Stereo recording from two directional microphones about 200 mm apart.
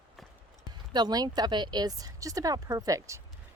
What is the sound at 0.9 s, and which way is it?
Speech, 20° right (ahead or behind).